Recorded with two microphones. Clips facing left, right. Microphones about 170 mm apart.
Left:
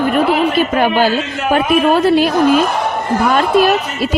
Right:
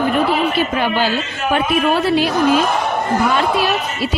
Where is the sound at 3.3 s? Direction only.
45° left (ahead or behind).